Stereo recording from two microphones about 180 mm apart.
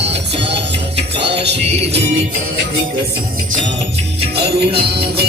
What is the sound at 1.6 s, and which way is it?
Music, 35° right (ahead or behind).